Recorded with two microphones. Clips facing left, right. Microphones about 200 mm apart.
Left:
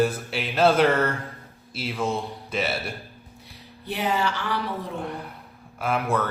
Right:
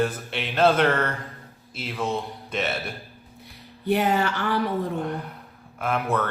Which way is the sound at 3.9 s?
50° right (ahead or behind).